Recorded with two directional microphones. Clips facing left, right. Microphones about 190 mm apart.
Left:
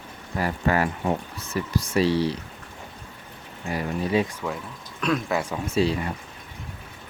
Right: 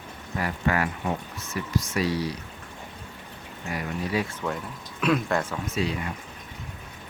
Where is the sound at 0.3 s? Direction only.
35° left (ahead or behind).